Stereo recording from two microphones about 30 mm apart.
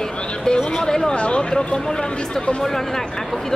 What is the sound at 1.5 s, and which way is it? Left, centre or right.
Speech, left.